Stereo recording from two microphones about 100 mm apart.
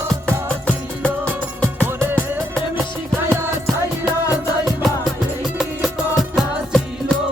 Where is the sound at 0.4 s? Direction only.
10° left (ahead or behind).